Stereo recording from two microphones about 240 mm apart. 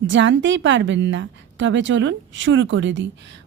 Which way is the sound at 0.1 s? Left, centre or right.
Right.